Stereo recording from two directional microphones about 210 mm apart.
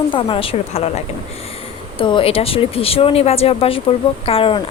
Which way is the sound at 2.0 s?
25° left (ahead or behind).